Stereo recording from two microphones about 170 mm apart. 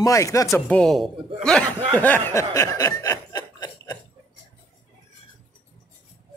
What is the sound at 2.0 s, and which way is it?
Chuckle, 10° left (ahead or behind).